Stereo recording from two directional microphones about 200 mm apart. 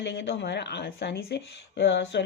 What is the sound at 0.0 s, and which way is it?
Speech, 60° left (ahead or behind).